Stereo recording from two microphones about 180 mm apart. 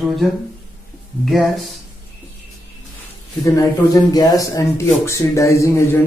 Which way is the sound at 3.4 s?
20° left (ahead or behind).